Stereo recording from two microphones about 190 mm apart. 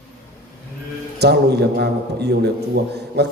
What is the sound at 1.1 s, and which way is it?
A man's voice, 60° right (ahead or behind).